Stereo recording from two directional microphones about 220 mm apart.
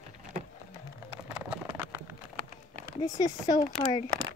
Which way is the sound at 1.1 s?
5° right (ahead or behind).